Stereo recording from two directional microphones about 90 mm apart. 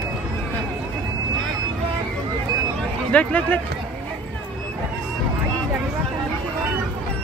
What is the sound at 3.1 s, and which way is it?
Speech, 15° left (ahead or behind).